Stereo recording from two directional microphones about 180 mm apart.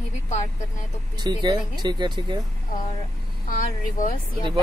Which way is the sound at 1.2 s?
25° right (ahead or behind).